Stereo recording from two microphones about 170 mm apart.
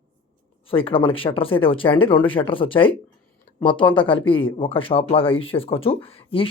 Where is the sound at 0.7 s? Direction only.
30° left (ahead or behind).